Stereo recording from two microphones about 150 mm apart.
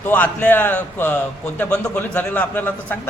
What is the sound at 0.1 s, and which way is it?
A man's voice, 10° left (ahead or behind).